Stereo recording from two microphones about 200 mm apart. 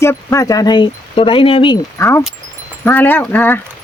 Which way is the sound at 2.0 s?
15° left (ahead or behind).